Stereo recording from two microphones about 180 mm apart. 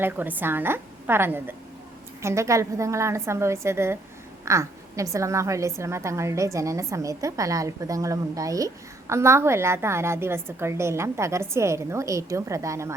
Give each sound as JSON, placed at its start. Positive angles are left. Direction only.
{"t": 0.0, "sound": "a woman's voice", "side_deg": -10}